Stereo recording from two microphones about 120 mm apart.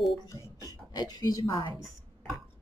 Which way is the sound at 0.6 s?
35° left (ahead or behind).